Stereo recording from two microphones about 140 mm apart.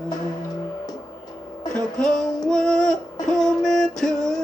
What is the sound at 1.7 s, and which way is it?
Music, 5° left (ahead or behind).